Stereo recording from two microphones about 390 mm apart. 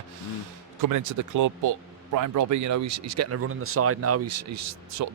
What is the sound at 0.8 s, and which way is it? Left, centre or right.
Speech, right.